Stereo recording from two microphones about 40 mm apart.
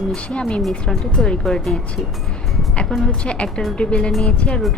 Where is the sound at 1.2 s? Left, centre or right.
Centre.